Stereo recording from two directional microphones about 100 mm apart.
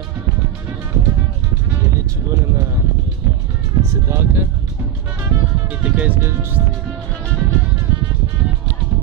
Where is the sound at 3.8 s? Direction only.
25° right (ahead or behind).